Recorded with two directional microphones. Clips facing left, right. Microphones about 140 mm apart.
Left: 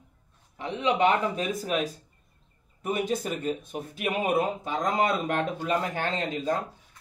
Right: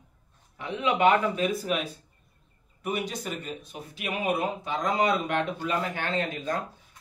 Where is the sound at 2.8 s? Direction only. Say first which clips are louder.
Left 3 dB; 45° left (ahead or behind).